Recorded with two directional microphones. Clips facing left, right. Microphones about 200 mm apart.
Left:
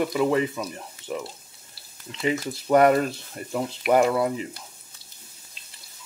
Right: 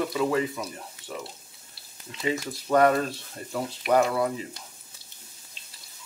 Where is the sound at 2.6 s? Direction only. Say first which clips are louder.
Left 3 dB; 25° left (ahead or behind).